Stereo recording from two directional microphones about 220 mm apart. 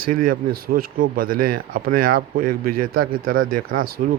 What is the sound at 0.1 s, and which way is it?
Speech, 40° right (ahead or behind).